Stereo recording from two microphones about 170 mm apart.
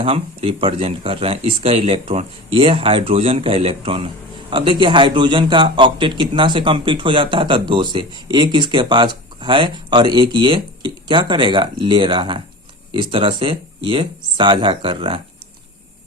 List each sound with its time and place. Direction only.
0.0 s speech: 35° right (ahead or behind)